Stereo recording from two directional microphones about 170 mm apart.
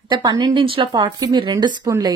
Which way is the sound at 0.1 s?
25° right (ahead or behind).